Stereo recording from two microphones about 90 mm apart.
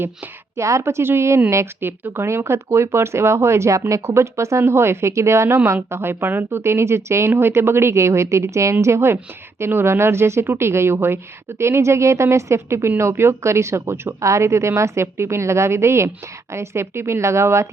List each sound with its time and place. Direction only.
0.5 s speech: 30° right (ahead or behind)